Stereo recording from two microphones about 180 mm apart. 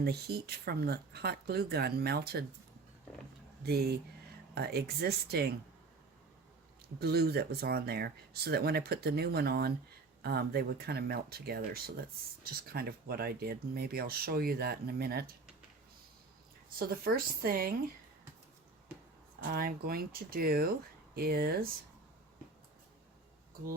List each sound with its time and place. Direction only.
0.0 s speech: 60° right (ahead or behind)
3.6 s speech: 60° right (ahead or behind)
7.0 s speech: 60° right (ahead or behind)
16.7 s speech: 55° right (ahead or behind)
19.5 s speech: 55° right (ahead or behind)